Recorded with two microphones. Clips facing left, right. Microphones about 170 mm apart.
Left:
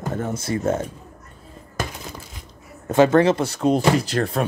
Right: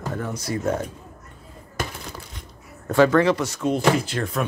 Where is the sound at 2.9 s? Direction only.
20° left (ahead or behind); by 4.2 s 40° left (ahead or behind).